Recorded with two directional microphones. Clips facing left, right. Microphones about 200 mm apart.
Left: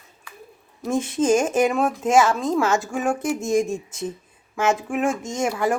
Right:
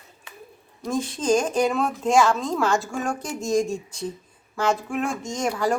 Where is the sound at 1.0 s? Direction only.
10° left (ahead or behind).